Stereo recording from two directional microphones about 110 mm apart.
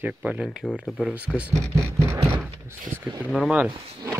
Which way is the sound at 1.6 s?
25° right (ahead or behind).